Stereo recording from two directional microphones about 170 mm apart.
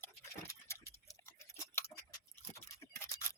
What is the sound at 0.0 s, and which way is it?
Dog, 15° left (ahead or behind).